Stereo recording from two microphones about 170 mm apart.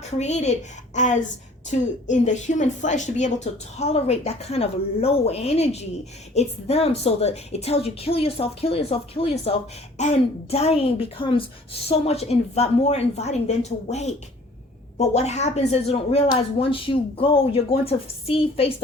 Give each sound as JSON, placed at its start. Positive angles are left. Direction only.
{"t": 0.1, "sound": "a woman's voice", "side_deg": 40}